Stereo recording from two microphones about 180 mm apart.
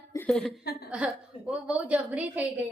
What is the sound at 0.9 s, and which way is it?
A woman's voice, 5° right (ahead or behind).